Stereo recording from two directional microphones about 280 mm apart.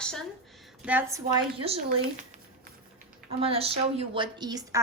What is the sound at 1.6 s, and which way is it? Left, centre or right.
A woman's voice, right.